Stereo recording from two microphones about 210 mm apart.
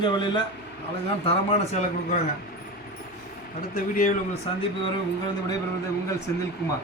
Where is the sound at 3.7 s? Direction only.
40° left (ahead or behind).